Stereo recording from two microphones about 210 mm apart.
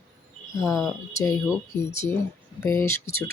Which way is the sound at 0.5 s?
15° left (ahead or behind).